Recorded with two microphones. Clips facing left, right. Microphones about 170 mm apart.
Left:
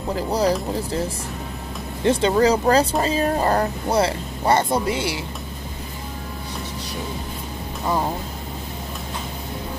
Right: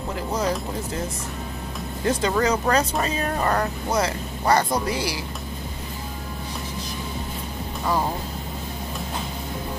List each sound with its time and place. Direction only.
0.3 s speech: 35° left (ahead or behind)
2.0 s speech: 30° left (ahead or behind)